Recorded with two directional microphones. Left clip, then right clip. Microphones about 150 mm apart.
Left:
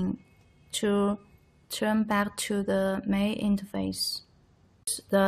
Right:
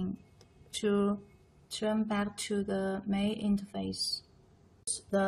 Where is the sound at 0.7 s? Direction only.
35° left (ahead or behind).